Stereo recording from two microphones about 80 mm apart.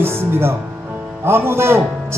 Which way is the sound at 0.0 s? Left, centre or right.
Right.